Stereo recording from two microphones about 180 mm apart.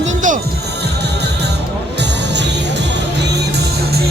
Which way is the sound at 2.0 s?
75° right (ahead or behind).